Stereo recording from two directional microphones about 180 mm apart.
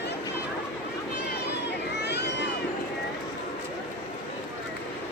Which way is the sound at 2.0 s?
70° left (ahead or behind).